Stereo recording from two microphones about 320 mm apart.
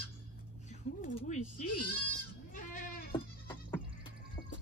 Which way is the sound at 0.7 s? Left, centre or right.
Left.